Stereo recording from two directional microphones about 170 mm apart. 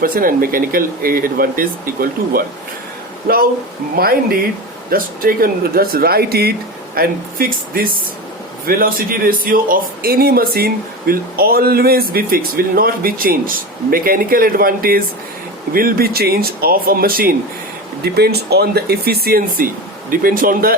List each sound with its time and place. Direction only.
0.0 s a man's voice: 55° right (ahead or behind)
3.9 s a man's voice: 60° right (ahead or behind)
18.0 s a man's voice: 70° right (ahead or behind)